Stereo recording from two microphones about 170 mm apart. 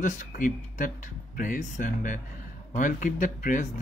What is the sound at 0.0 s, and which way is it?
Speech, 50° left (ahead or behind).